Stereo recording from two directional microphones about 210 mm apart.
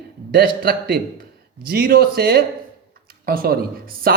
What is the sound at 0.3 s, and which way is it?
Speech, 45° right (ahead or behind).